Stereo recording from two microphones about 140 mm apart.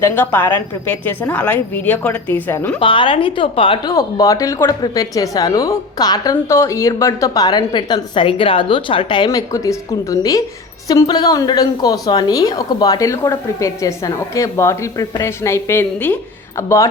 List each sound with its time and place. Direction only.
0.0 s a woman's voice: 15° left (ahead or behind)
2.8 s a woman's voice: 35° left (ahead or behind)
3.9 s speech: 25° left (ahead or behind)
9.5 s speech: 25° left (ahead or behind)